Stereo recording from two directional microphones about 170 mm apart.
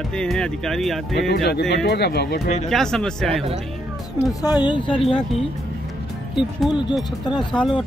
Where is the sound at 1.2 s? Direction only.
70° left (ahead or behind).